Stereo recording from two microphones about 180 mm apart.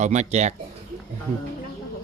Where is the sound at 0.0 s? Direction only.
40° right (ahead or behind).